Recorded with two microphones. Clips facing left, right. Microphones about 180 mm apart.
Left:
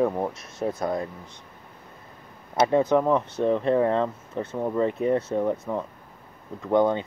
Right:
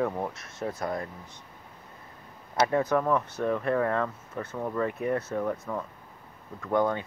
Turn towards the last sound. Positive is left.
turn(degrees=20)  # may be behind; listen again after turning